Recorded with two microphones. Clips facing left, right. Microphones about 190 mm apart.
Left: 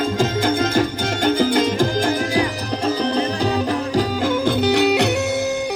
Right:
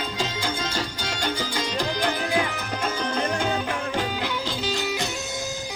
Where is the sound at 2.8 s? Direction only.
30° left (ahead or behind).